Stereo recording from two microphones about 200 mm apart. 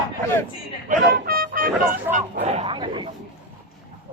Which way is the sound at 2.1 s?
35° right (ahead or behind).